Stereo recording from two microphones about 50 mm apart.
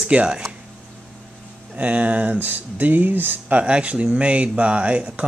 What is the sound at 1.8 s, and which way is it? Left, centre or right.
Speech, right.